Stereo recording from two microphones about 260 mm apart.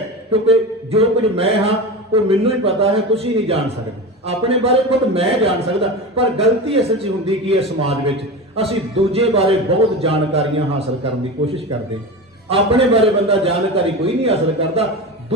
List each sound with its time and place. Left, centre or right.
0.4 s a man's voice: right
12.5 s a man's voice: right